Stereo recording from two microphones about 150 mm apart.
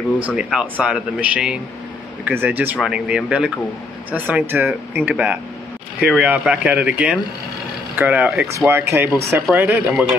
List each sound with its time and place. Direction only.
0.4 s speech: 5° right (ahead or behind)